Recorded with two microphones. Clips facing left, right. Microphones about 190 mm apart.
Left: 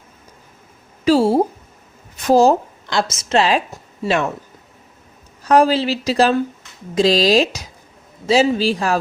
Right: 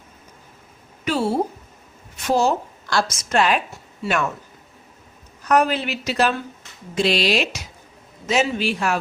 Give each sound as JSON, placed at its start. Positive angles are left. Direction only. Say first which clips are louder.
{"t": 1.0, "sound": "a sound", "louder": "left 8 dB", "side_deg": 35}
{"t": 2.2, "sound": "speech", "louder": "left 7 dB", "side_deg": 35}
{"t": 2.8, "sound": "a woman's voice", "louder": "left 2 dB", "side_deg": 20}
{"t": 5.4, "sound": "speech", "louder": "left 5 dB", "side_deg": 30}